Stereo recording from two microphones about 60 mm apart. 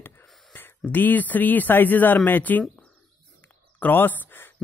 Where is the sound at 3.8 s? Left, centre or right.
Left.